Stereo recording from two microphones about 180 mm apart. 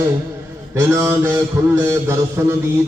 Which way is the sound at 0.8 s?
15° right (ahead or behind).